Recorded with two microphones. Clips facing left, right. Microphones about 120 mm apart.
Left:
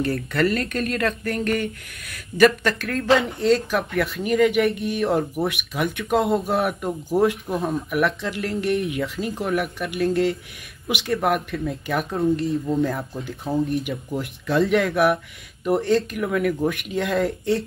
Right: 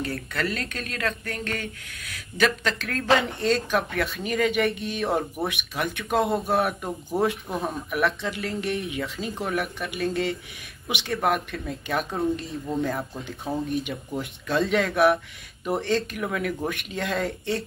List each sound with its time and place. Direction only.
0.0 s speech: centre (ahead or behind)